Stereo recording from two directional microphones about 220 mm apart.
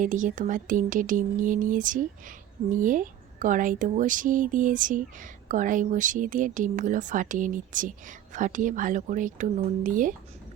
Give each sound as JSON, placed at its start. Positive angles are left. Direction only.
{"t": 0.0, "sound": "speech", "side_deg": -35}